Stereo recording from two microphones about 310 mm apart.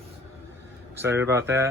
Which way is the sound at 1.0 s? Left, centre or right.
Centre.